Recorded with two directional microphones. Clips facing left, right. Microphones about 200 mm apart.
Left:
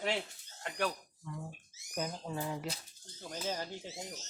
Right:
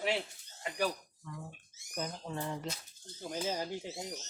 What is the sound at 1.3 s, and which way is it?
Speech, 10° left (ahead or behind).